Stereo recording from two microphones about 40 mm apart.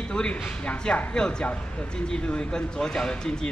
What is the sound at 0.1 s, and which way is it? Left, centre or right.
A woman's voice, left.